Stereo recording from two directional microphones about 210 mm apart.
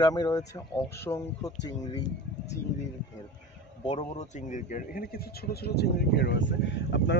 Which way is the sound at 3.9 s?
30° left (ahead or behind).